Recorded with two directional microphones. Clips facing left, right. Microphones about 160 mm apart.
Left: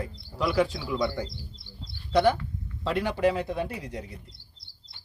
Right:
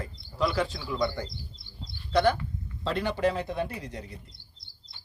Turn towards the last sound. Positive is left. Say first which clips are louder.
# left 1 dB
turn(degrees=5)  # may be behind; listen again after turning